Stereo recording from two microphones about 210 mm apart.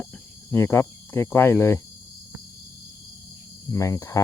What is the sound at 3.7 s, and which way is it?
Speech, 15° left (ahead or behind).